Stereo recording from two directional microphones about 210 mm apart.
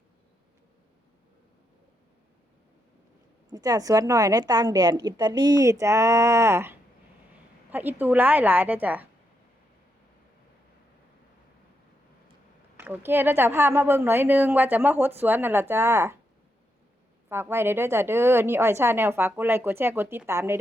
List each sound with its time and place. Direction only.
3.5 s a woman's voice: 15° right (ahead or behind)
12.7 s a woman's voice: 10° right (ahead or behind)
17.2 s a woman's voice: 10° right (ahead or behind)